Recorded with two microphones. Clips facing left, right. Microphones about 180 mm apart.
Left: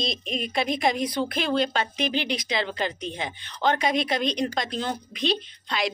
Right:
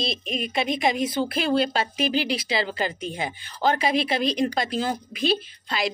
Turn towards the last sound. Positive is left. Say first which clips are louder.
# right 1 dB
turn(degrees=-5)  # may be behind; listen again after turning